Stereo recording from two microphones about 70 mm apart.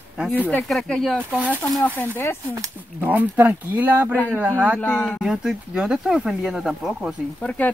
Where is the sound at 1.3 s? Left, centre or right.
Right.